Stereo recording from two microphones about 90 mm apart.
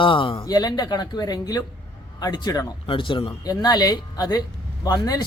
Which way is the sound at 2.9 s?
70° left (ahead or behind).